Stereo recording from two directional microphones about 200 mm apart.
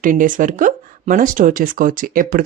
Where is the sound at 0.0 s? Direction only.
40° right (ahead or behind).